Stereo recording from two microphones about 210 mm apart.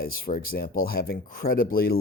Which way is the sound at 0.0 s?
45° left (ahead or behind).